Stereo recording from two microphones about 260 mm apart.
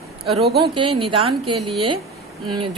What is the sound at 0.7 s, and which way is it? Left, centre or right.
A woman's voice, centre.